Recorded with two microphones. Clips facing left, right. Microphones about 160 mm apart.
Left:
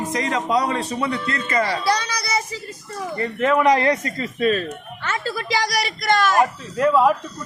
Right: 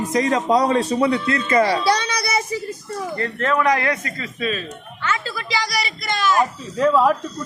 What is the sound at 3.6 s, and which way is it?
Speech, 30° left (ahead or behind).